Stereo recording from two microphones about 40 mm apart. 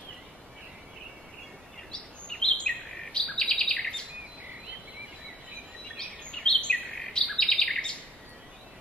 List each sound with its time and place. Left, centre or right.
1.9 s bird vocalization: left
5.9 s bird: left